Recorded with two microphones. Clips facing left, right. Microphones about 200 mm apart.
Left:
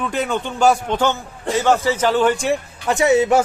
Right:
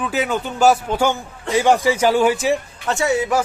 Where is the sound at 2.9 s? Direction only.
20° left (ahead or behind).